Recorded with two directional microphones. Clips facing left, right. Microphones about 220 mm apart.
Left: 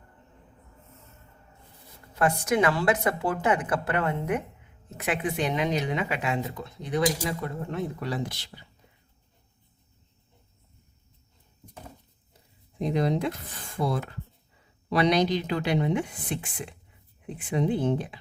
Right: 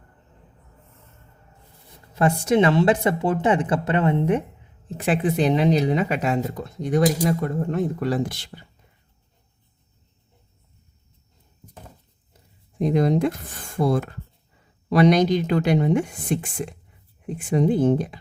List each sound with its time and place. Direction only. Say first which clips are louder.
2.1 s a woman's voice: right 5 dB; 25° right (ahead or behind); by 8.6 s 50° right (ahead or behind)
12.8 s speech: right 6 dB; 45° right (ahead or behind)